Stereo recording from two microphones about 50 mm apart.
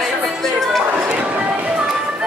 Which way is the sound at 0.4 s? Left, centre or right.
Centre.